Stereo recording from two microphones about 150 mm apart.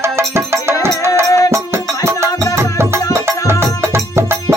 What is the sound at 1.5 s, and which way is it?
Music, 15° right (ahead or behind).